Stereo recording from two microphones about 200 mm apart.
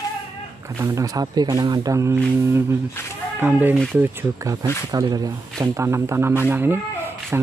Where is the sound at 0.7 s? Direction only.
15° right (ahead or behind).